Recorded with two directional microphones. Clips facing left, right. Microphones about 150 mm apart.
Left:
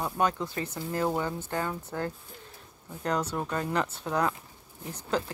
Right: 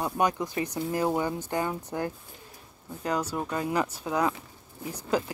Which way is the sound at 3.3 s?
10° right (ahead or behind).